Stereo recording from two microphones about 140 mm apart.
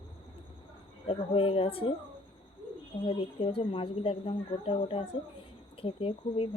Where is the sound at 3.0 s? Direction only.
40° left (ahead or behind).